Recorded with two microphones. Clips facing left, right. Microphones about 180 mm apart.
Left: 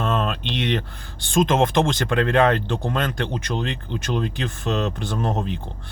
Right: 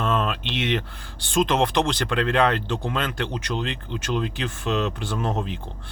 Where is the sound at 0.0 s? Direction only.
45° left (ahead or behind).